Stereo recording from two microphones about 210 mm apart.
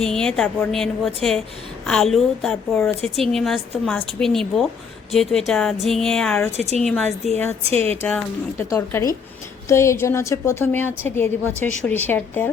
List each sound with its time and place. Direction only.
0.0 s a woman's voice: 5° left (ahead or behind)
6.6 s a woman's voice: 30° right (ahead or behind)
6.8 s a woman's voice: centre (ahead or behind)
7.6 s speech: 30° right (ahead or behind)
8.0 s a woman's voice: 10° left (ahead or behind)